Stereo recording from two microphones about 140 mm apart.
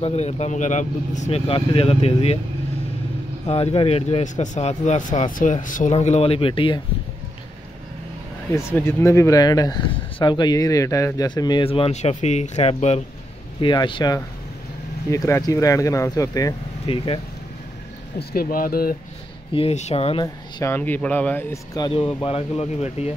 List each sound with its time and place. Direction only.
0.0 s speech: 50° left (ahead or behind)
1.5 s speech: 40° left (ahead or behind)
3.4 s speech: 45° left (ahead or behind)
8.5 s speech: 20° left (ahead or behind); by 13.0 s 50° left (ahead or behind)
13.6 s speech: 35° left (ahead or behind)
16.9 s speech: 45° left (ahead or behind)
18.3 s speech: 90° left
19.5 s speech: 50° left (ahead or behind)
20.6 s speech: 15° left (ahead or behind)
21.9 s speech: 40° left (ahead or behind)